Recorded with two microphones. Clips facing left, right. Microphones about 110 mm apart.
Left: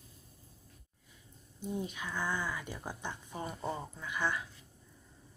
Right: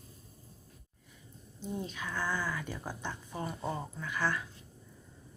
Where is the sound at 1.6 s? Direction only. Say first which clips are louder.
Even; 15° left (ahead or behind).